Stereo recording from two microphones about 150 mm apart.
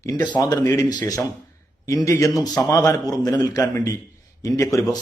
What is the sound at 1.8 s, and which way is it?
A man's voice, 20° left (ahead or behind).